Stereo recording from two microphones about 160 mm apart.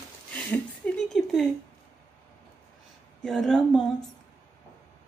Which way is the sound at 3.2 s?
Centre (ahead or behind).